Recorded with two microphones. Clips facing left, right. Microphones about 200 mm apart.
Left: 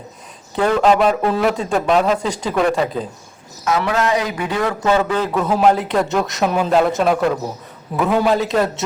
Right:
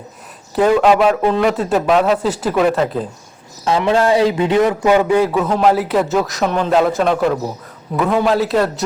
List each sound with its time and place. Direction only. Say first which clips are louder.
0.8 s speech: right 2 dB; centre (ahead or behind)
3.6 s a man's voice: right 4 dB; 30° right (ahead or behind); by 5.5 s 10° right (ahead or behind)
5.5 s speech: right 1 dB; centre (ahead or behind)